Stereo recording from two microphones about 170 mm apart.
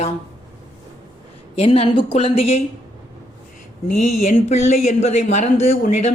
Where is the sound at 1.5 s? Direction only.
35° left (ahead or behind).